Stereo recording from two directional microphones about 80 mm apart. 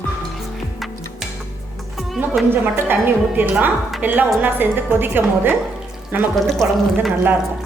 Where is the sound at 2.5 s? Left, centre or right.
Right.